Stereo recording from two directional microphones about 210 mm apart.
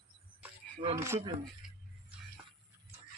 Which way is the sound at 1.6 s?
5° right (ahead or behind).